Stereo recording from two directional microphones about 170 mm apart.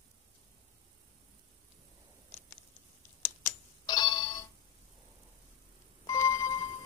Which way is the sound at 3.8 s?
25° left (ahead or behind).